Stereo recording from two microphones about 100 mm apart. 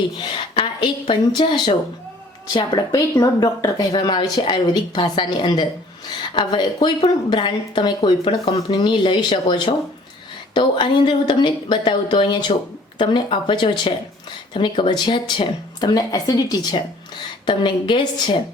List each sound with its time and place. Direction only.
0.5 s a woman's voice: 55° left (ahead or behind)
2.7 s a woman's voice: 35° left (ahead or behind)
17.4 s speech: 50° left (ahead or behind)